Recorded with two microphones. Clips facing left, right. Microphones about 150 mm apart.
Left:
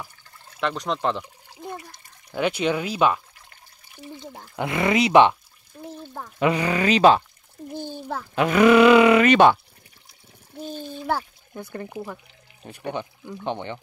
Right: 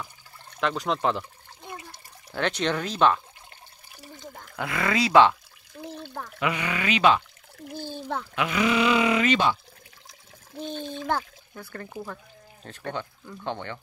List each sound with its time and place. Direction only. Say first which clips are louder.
0.0 s water: even; 5° left (ahead or behind)
2.3 s speech: left 3 dB; 10° left (ahead or behind)
4.6 s speech: left 5 dB; 25° left (ahead or behind)
5.8 s water: even; 75° right (ahead or behind)
6.4 s speech: left 7 dB; 35° left (ahead or behind)
7.7 s a sound: left 3 dB; 15° left (ahead or behind)
8.4 s speech: left 9 dB; 50° left (ahead or behind)
10.6 s speech: even; 10° left (ahead or behind)